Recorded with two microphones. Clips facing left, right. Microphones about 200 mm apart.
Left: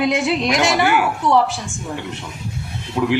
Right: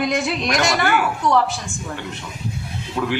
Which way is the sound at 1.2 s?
30° left (ahead or behind).